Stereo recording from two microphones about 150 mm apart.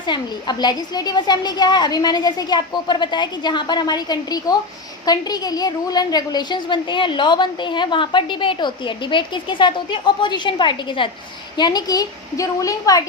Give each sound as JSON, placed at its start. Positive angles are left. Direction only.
{"t": 0.0, "sound": "a woman's voice", "side_deg": 30}